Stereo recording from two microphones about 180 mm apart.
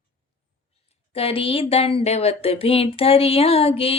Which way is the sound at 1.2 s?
30° left (ahead or behind).